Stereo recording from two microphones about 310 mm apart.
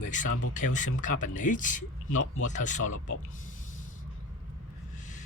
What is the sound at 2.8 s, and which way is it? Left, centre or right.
Speech, left.